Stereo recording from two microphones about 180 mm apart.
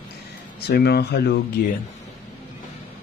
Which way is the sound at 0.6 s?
65° left (ahead or behind).